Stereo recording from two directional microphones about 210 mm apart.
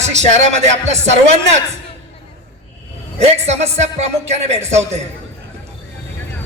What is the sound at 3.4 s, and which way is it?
A man's voice, 30° right (ahead or behind).